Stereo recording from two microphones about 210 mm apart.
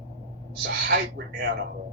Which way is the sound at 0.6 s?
55° right (ahead or behind).